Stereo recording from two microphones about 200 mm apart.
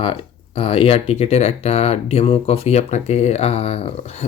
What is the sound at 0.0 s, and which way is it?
Speech, 25° left (ahead or behind).